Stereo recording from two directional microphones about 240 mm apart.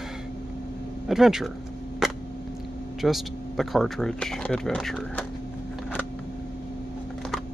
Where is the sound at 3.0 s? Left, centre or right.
Centre.